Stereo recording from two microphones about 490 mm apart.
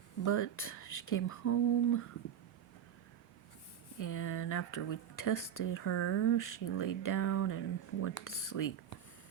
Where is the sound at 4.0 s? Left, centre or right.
Left.